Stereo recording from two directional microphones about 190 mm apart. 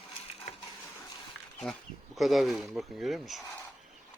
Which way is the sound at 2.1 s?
Centre (ahead or behind).